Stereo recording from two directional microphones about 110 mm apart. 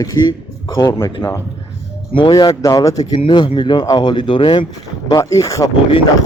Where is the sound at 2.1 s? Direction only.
45° left (ahead or behind).